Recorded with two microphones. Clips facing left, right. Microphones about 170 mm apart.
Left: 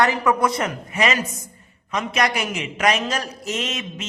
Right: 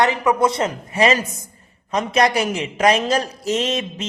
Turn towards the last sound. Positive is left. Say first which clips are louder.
# right 6 dB
turn(degrees=-35)  # may be behind; listen again after turning